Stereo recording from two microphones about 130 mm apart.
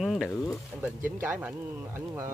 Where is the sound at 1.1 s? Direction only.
15° right (ahead or behind).